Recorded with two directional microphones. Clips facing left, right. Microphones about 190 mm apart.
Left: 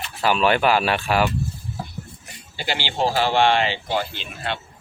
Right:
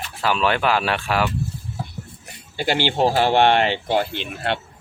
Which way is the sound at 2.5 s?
55° right (ahead or behind).